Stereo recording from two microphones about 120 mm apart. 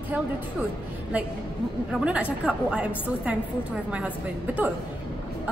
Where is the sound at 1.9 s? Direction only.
10° right (ahead or behind).